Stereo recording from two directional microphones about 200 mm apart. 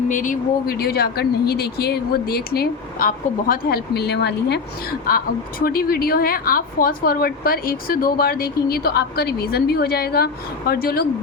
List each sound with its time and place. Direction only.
0.1 s speech: 40° left (ahead or behind)